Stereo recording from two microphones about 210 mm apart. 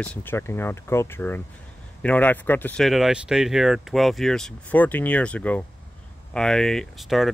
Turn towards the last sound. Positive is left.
turn(degrees=0)  # may be behind; listen again after turning